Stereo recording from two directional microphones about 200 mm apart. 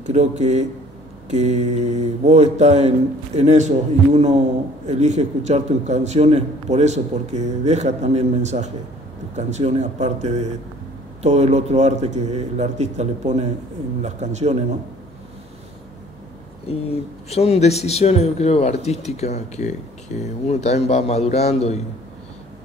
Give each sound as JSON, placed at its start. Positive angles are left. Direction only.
{"t": 0.0, "sound": "a man's voice", "side_deg": -35}
{"t": 16.7, "sound": "speech", "side_deg": 30}